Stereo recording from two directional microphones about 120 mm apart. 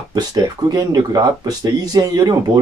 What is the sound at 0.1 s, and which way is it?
Speech, 35° right (ahead or behind).